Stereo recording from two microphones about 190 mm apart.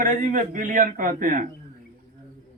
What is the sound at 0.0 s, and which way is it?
A man's voice, 45° right (ahead or behind).